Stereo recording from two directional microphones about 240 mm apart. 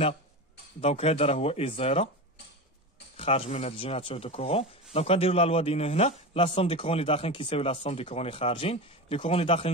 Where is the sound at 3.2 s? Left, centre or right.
Left.